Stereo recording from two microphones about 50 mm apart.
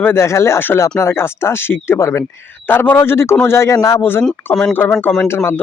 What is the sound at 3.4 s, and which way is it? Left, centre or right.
Speech, left.